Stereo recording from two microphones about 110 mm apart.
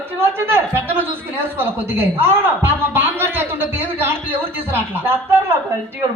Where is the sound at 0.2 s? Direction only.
20° right (ahead or behind).